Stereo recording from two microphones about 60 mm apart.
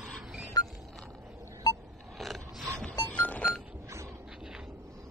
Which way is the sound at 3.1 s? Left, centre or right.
Left.